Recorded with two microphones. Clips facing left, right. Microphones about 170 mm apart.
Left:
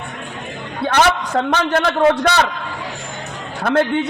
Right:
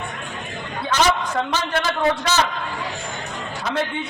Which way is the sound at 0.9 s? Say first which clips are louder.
Left 4 dB; 60° left (ahead or behind).